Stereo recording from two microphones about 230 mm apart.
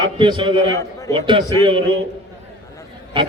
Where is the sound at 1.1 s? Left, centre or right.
Right.